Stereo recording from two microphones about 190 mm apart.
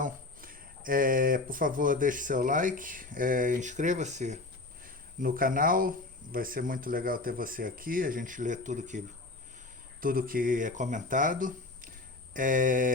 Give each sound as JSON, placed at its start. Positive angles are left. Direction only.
{"t": 0.0, "sound": "speech", "side_deg": -45}